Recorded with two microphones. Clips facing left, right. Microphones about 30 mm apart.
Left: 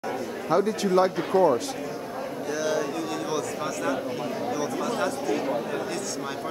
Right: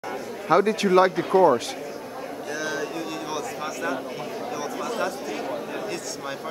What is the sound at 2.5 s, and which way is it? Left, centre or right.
Speech, centre.